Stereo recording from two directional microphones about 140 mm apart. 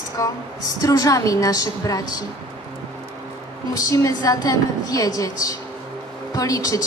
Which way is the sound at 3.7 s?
25° left (ahead or behind).